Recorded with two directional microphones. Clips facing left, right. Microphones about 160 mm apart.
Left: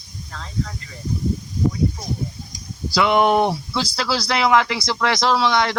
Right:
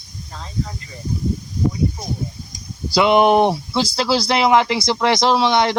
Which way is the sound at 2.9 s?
20° right (ahead or behind).